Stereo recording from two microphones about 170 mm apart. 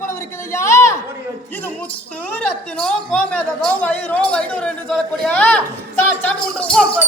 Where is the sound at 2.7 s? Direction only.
5° left (ahead or behind).